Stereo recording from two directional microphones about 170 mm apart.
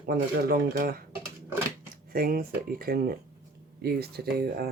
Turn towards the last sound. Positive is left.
turn(degrees=-65)  # may be behind; listen again after turning